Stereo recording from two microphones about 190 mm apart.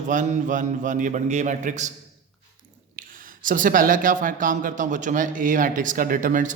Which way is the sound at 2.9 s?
45° right (ahead or behind).